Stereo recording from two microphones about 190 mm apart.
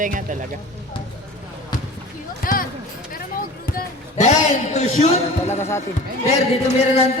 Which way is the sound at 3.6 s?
50° left (ahead or behind).